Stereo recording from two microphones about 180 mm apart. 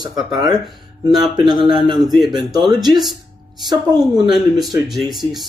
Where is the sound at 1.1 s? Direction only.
Centre (ahead or behind).